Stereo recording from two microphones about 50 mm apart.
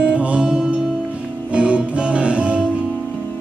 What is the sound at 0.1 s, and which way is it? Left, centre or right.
Music, right.